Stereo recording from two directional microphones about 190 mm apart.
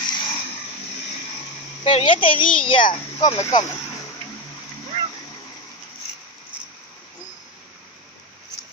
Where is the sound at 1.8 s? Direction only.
30° left (ahead or behind).